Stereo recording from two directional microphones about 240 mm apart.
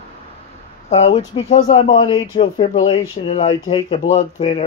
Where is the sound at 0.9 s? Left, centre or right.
Left.